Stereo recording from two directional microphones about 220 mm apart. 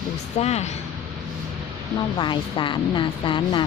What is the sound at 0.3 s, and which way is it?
Speech, 30° left (ahead or behind).